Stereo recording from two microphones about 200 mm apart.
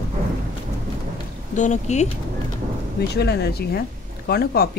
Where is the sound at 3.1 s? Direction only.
55° left (ahead or behind).